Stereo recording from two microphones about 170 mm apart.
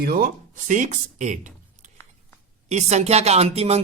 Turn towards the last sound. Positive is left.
turn(degrees=-40)  # may be behind; listen again after turning